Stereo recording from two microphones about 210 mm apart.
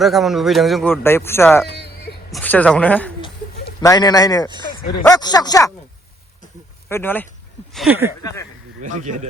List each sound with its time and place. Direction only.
0.0 s speech: centre (ahead or behind)
1.6 s a sound: 50° left (ahead or behind)
2.3 s a woman's voice: 5° left (ahead or behind)
3.8 s a woman's voice: 20° left (ahead or behind)
6.8 s speech: 10° left (ahead or behind)
7.8 s speech: 10° right (ahead or behind)
8.8 s speech: 35° right (ahead or behind)